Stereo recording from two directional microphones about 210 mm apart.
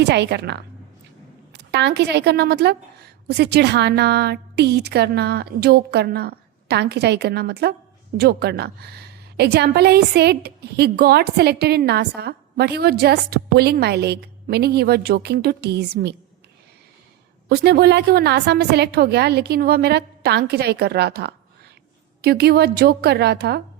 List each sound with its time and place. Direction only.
0.0 s a woman's voice: 55° right (ahead or behind)
1.7 s a woman's voice: 55° right (ahead or behind)
17.5 s a woman's voice: 50° right (ahead or behind)